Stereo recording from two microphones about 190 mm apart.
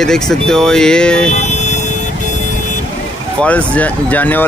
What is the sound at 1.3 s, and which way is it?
Vehicle, 35° left (ahead or behind).